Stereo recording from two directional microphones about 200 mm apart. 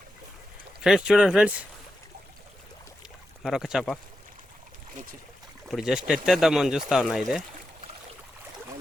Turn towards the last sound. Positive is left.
turn(degrees=0)  # may be behind; listen again after turning